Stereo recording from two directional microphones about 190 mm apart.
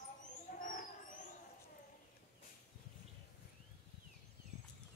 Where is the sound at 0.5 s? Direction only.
45° left (ahead or behind).